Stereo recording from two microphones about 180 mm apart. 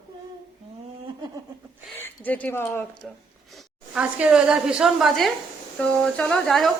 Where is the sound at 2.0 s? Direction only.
10° left (ahead or behind).